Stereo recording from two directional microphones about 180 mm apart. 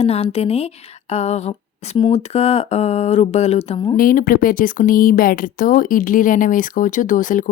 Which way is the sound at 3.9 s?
50° left (ahead or behind).